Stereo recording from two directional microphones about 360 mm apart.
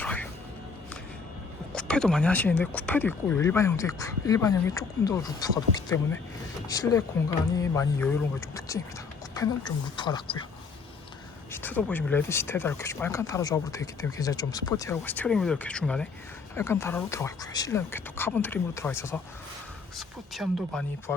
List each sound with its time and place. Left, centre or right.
0.0 s music: centre
1.7 s speech: centre
11.5 s speech: centre